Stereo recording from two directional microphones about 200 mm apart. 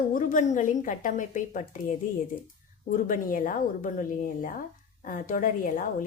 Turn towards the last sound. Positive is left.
turn(degrees=40)  # may be behind; listen again after turning